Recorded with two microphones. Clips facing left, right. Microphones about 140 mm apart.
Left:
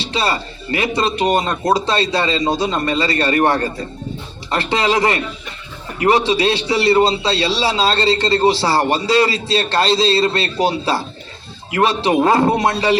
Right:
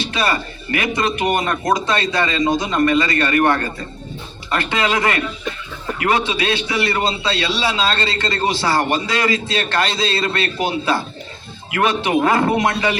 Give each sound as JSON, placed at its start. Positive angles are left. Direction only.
{"t": 0.0, "sound": "a man's voice", "side_deg": 30}